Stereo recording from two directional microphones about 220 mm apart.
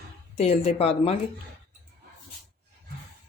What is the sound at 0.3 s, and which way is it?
Speech, 30° left (ahead or behind).